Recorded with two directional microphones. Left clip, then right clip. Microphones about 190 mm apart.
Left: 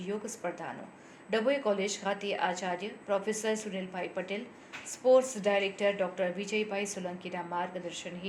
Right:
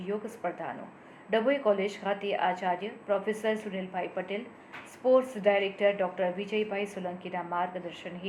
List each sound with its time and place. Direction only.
0.1 s a woman's voice: 30° left (ahead or behind)